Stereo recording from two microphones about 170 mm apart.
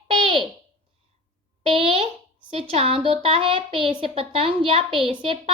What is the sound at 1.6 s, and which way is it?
A woman's voice, 30° right (ahead or behind).